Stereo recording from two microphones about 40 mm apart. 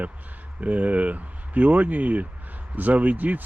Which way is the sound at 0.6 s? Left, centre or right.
Right.